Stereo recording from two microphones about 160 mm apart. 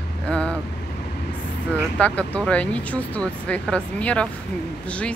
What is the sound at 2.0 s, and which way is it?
Speech, 10° left (ahead or behind).